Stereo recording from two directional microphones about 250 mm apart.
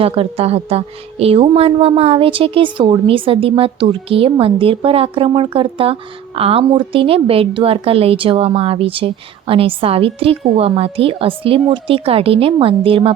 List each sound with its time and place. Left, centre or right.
0.0 s a woman's voice: right